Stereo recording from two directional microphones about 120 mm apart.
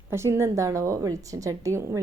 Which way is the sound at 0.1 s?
20° right (ahead or behind).